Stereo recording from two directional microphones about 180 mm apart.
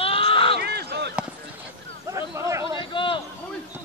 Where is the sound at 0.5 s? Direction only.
65° right (ahead or behind).